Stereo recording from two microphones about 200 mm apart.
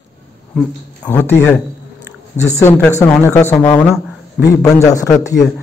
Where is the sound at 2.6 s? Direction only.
15° left (ahead or behind).